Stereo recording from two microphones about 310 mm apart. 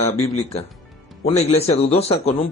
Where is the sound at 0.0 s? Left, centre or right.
Centre.